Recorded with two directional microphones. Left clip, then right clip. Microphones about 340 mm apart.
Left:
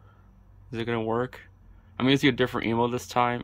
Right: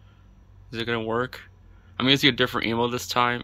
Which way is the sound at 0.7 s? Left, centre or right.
Centre.